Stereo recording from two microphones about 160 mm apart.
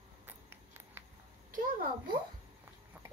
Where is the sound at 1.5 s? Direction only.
65° right (ahead or behind).